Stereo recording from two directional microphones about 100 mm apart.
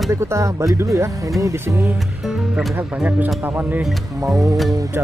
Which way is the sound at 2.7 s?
15° right (ahead or behind).